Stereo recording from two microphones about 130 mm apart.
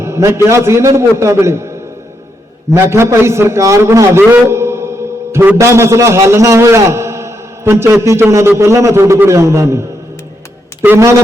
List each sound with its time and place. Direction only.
0.0 s a man's voice: 20° right (ahead or behind)
2.7 s a man's voice: 20° right (ahead or behind)
4.3 s a sound: 20° right (ahead or behind)
5.3 s a man's voice: 20° right (ahead or behind)
10.8 s a man's voice: 20° right (ahead or behind)